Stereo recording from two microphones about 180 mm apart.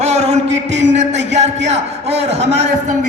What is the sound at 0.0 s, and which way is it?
Music, 40° right (ahead or behind).